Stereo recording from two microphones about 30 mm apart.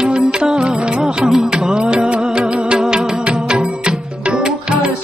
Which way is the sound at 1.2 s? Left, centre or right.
Centre.